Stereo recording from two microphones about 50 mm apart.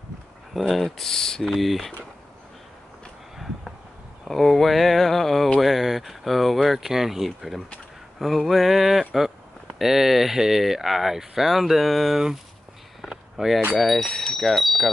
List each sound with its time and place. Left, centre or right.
0.6 s speech: centre
1.4 s speech: centre
4.2 s speech: centre
13.1 s a sound: centre
13.7 s speech: centre
14.2 s wind chime: centre